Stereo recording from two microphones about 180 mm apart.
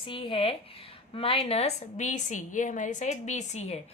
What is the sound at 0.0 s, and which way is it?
A woman's voice, 30° left (ahead or behind).